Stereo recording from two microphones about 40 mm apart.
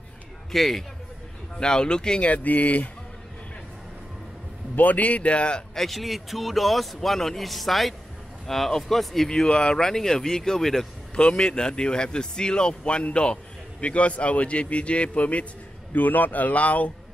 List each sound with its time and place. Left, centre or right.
0.5 s a man's voice: centre
1.6 s speech: centre
2.2 s speech: left
4.7 s speech: left
5.8 s a man's voice: centre
9.4 s speech: left
9.8 s speech: centre; by 15.4 s left
15.9 s speech: left